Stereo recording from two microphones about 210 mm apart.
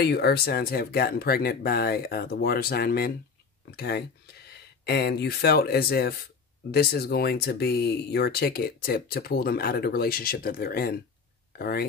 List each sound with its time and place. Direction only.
0.0 s speech: 50° left (ahead or behind)